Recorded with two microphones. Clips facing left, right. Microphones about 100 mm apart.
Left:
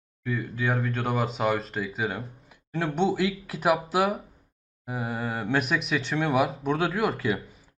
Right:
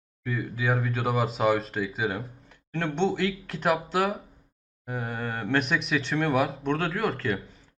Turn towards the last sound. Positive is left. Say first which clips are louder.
# left 2 dB
turn(degrees=5)  # may be behind; listen again after turning